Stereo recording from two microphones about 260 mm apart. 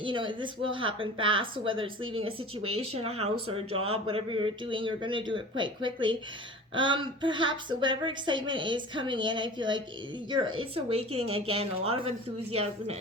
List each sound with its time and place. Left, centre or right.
0.0 s speech: centre